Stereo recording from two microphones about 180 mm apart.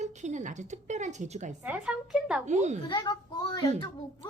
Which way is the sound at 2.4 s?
40° right (ahead or behind).